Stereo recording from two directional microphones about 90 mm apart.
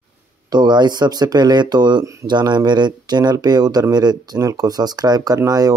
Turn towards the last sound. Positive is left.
turn(degrees=-45)  # may be behind; listen again after turning